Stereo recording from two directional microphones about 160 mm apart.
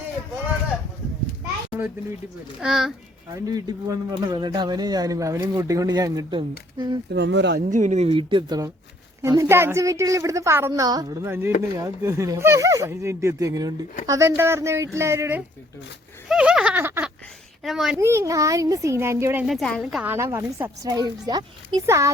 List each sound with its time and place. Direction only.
2.6 s a woman's voice: 5° right (ahead or behind)
3.3 s speech: 20° right (ahead or behind)
7.1 s speech: 90° right
7.6 s speech: 50° right (ahead or behind); by 15.4 s 15° right (ahead or behind)
16.3 s a sound: 5° right (ahead or behind)
17.6 s a woman's voice: centre (ahead or behind)
17.9 s speech: 15° right (ahead or behind)
19.5 s a woman's voice: centre (ahead or behind)
20.1 s speech: 15° right (ahead or behind)